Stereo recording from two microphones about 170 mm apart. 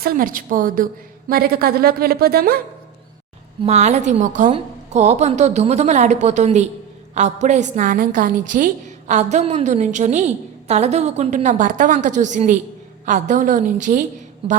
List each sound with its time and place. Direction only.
0.0 s speech: 55° right (ahead or behind)
3.6 s a woman's voice: 40° right (ahead or behind)